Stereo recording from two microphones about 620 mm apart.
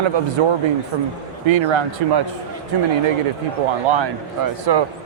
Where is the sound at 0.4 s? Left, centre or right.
Right.